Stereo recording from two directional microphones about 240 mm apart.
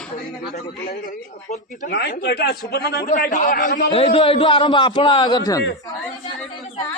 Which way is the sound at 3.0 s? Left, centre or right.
Left.